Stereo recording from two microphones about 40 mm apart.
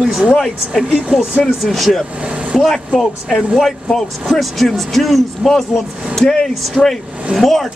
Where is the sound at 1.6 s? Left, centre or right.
Centre.